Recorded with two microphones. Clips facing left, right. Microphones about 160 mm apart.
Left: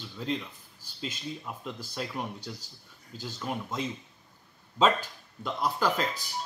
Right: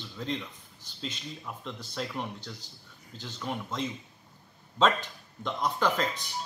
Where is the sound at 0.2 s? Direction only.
5° left (ahead or behind).